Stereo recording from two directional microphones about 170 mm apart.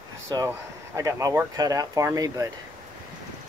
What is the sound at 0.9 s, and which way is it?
Speech, 20° right (ahead or behind).